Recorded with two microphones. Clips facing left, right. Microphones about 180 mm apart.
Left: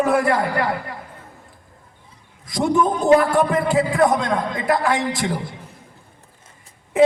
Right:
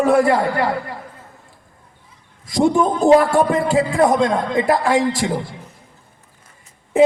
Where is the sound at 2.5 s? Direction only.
30° right (ahead or behind).